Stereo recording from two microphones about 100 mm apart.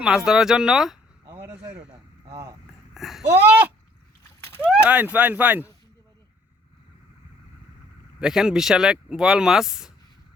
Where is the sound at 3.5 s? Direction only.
15° right (ahead or behind).